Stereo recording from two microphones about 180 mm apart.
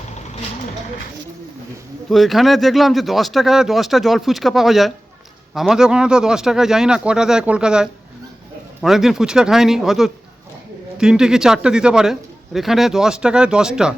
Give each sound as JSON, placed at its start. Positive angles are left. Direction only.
{"t": 2.0, "sound": "speech", "side_deg": 0}